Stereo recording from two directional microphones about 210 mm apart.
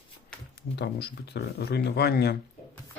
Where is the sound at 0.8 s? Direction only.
50° left (ahead or behind).